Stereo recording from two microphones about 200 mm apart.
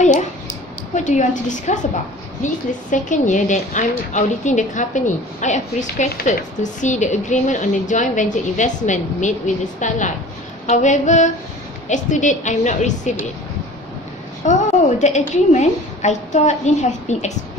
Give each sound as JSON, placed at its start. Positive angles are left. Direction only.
{"t": 0.0, "sound": "a sound", "side_deg": 35}
{"t": 0.9, "sound": "a woman's voice", "side_deg": 35}
{"t": 14.4, "sound": "a woman's voice", "side_deg": 35}